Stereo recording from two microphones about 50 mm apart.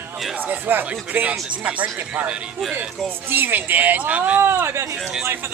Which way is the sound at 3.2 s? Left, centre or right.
Right.